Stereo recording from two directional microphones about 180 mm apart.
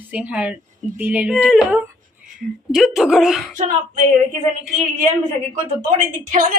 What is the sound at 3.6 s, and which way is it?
Speech, 45° right (ahead or behind).